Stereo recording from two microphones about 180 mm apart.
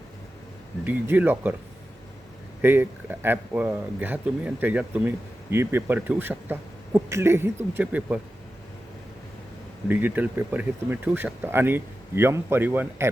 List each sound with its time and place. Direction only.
0.9 s speech: 10° right (ahead or behind)
2.6 s speech: 10° right (ahead or behind)
9.9 s speech: 10° right (ahead or behind)